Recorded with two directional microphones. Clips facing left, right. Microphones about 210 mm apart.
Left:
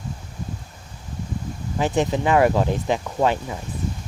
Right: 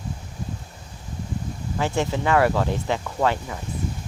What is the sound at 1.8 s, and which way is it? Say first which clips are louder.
Speech: left 3 dB; 20° left (ahead or behind).